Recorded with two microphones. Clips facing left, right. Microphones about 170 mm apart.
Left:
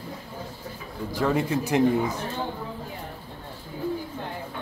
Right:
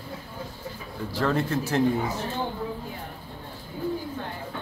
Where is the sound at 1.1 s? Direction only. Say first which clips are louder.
Left 1 dB; 10° left (ahead or behind).